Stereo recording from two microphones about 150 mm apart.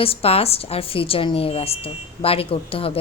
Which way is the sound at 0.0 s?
40° left (ahead or behind).